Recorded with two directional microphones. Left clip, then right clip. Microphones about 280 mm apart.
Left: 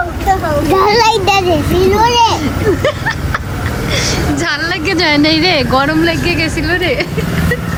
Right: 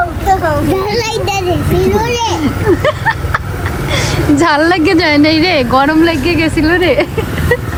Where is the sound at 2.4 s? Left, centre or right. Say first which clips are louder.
Right 2 dB; centre.